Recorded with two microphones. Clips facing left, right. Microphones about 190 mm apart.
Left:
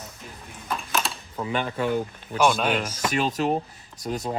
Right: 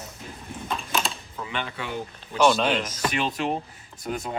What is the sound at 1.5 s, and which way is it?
Speech, 45° left (ahead or behind).